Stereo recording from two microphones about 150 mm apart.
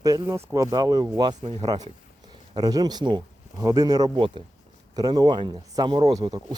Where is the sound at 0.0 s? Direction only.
25° right (ahead or behind).